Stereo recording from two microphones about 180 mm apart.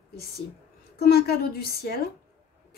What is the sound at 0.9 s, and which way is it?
A woman's voice, 60° left (ahead or behind).